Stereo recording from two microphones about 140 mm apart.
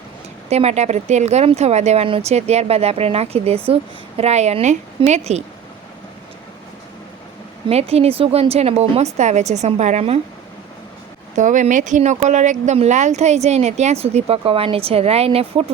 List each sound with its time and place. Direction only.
0.5 s speech: 50° right (ahead or behind)
7.7 s speech: 45° right (ahead or behind)
11.3 s speech: 60° right (ahead or behind); by 15.6 s 45° right (ahead or behind)